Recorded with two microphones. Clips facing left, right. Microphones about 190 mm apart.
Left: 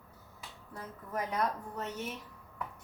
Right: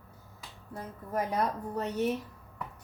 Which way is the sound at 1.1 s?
30° right (ahead or behind).